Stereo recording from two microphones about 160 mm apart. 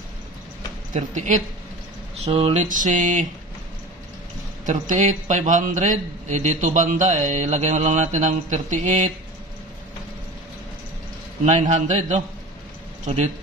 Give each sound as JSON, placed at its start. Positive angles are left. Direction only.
{"t": 0.9, "sound": "a man's voice", "side_deg": -50}
{"t": 2.2, "sound": "a sound", "side_deg": -40}
{"t": 2.7, "sound": "a man's voice", "side_deg": -55}
{"t": 4.6, "sound": "a man's voice", "side_deg": -55}
{"t": 11.6, "sound": "a man's voice", "side_deg": -50}